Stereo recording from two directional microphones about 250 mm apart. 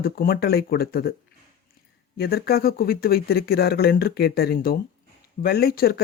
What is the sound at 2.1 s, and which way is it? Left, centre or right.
Speech, left.